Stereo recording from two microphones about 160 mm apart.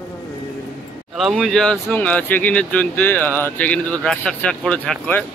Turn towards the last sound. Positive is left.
turn(degrees=10)  # may be behind; listen again after turning